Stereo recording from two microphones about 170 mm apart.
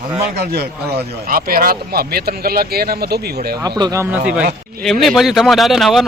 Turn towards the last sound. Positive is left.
turn(degrees=0)  # may be behind; listen again after turning